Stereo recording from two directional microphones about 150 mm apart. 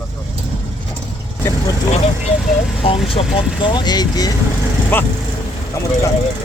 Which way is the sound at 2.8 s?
40° left (ahead or behind).